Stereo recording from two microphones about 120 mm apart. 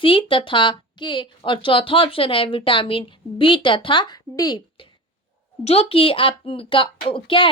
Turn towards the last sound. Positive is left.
turn(degrees=45)  # may be behind; listen again after turning